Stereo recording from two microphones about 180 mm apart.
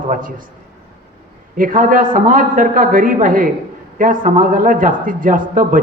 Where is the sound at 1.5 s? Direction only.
50° right (ahead or behind).